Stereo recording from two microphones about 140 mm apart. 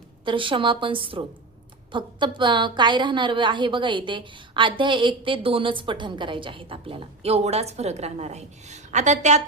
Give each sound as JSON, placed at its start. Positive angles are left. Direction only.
{"t": 0.3, "sound": "a woman's voice", "side_deg": -35}